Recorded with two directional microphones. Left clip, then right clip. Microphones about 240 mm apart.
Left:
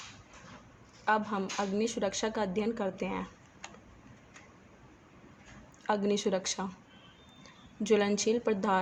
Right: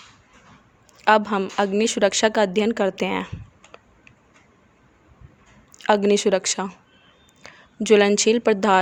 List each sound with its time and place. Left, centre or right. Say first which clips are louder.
1.0 s a woman's voice: right 12 dB; right
5.7 s a woman's voice: right 13 dB; right